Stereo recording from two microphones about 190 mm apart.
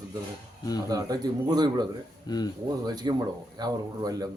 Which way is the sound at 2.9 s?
20° right (ahead or behind).